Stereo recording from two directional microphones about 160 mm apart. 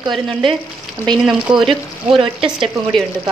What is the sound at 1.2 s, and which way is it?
A woman's voice, centre (ahead or behind).